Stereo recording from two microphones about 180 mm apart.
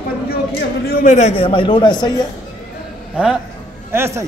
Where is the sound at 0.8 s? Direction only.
50° left (ahead or behind); by 2.1 s 25° left (ahead or behind).